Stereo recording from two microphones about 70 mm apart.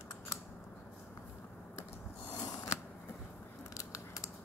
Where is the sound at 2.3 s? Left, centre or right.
Left.